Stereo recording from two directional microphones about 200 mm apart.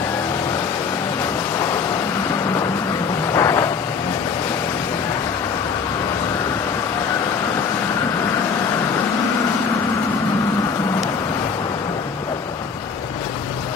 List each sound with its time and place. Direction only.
3.3 s vehicle: 15° left (ahead or behind)